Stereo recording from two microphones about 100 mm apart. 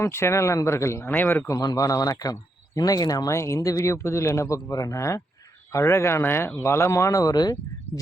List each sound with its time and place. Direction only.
0.0 s speech: 25° left (ahead or behind)
1.5 s speech: 35° left (ahead or behind)